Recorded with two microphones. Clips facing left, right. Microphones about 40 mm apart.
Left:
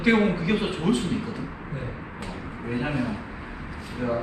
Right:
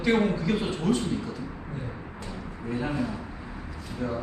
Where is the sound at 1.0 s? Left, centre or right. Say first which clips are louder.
Left 2 dB; left.